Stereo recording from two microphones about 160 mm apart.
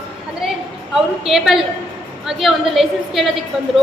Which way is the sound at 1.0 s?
Centre (ahead or behind).